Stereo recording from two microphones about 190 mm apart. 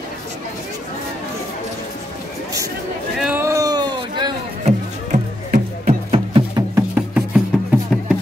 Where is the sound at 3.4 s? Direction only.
20° right (ahead or behind).